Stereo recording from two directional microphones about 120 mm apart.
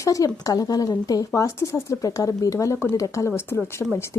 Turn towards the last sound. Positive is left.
turn(degrees=20)  # may be behind; listen again after turning